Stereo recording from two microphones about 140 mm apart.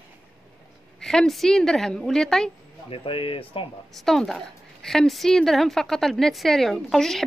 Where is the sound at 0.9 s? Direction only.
5° left (ahead or behind).